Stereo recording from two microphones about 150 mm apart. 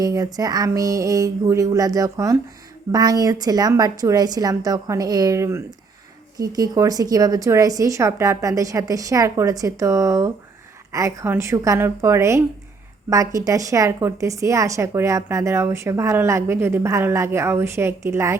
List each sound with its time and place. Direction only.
0.0 s a woman's voice: 25° right (ahead or behind)